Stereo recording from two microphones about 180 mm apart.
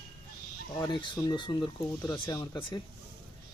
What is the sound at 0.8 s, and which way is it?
Speech, 25° left (ahead or behind).